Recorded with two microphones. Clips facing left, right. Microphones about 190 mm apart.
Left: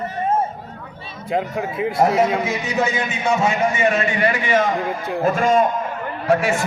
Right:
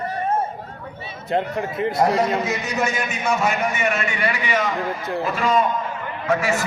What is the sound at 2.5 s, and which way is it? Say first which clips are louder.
A man's voice: left 2 dB; 15° left (ahead or behind).